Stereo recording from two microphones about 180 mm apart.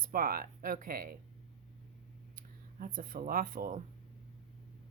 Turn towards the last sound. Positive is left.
turn(degrees=-50)  # may be behind; listen again after turning